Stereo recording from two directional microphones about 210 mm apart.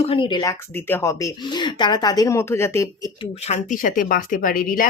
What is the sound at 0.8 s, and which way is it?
Speech, 10° left (ahead or behind).